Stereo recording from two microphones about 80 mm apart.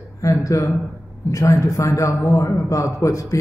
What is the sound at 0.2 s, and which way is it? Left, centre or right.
A man's voice, left.